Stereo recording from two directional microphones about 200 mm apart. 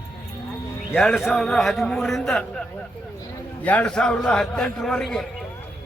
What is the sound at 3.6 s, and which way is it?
A man's voice, 5° left (ahead or behind).